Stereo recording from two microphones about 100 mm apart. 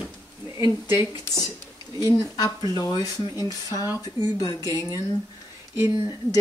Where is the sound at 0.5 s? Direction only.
30° right (ahead or behind).